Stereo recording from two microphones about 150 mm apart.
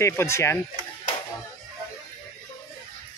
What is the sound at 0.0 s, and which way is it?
Speech, 15° left (ahead or behind).